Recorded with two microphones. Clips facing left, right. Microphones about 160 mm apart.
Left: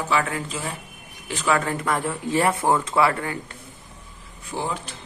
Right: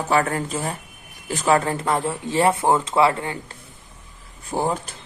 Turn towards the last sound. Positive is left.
turn(degrees=-45)  # may be behind; listen again after turning